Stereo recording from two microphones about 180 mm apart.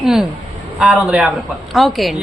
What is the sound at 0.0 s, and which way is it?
A woman's voice, 5° right (ahead or behind).